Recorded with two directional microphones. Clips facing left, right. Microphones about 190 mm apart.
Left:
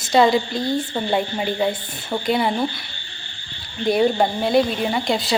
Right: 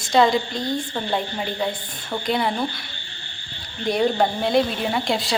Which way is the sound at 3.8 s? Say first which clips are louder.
Left 2 dB; 5° left (ahead or behind).